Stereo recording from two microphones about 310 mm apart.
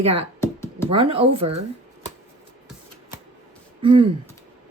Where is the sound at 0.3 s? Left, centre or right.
Centre.